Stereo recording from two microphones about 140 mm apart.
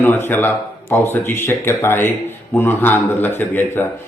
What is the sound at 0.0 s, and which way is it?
Speech, 15° left (ahead or behind).